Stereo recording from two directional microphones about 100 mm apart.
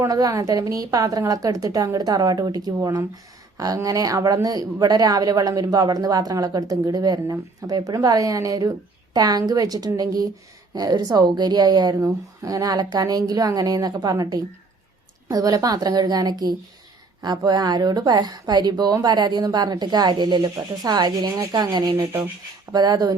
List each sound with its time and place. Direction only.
0.0 s a woman's voice: 35° right (ahead or behind)
11.9 s a woman's voice: 30° right (ahead or behind)
21.9 s rub: 20° right (ahead or behind)
22.7 s a woman's voice: 40° right (ahead or behind)